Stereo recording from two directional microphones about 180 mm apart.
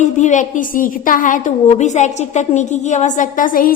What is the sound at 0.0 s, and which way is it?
A woman's voice, 45° left (ahead or behind).